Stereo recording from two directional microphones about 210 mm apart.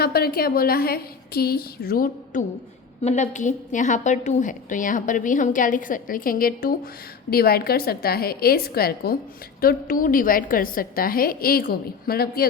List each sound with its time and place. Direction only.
0.0 s a woman's voice: 45° left (ahead or behind)
3.0 s a woman's voice: 35° left (ahead or behind)